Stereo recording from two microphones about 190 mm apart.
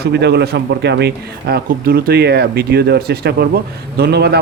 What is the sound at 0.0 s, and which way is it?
Speech, 60° right (ahead or behind).